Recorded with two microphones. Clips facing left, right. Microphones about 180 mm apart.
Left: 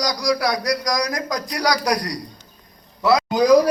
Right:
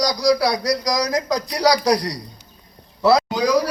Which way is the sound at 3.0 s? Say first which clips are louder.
Right 2 dB; 30° right (ahead or behind).